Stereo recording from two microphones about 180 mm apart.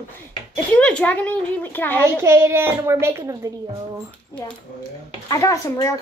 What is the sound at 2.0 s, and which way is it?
A woman's voice, 15° right (ahead or behind).